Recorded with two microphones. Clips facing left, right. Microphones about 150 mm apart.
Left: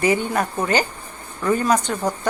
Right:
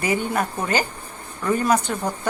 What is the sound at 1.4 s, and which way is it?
Speech, 10° right (ahead or behind).